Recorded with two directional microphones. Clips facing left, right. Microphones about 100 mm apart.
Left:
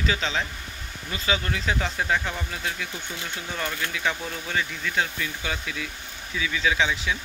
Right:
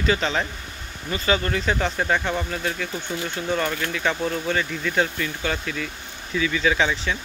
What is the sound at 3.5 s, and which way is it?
Speech, 5° right (ahead or behind).